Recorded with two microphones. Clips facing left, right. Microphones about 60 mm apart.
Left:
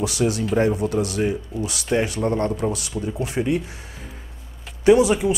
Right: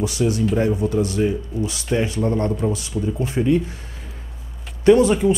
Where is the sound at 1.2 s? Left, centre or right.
Centre.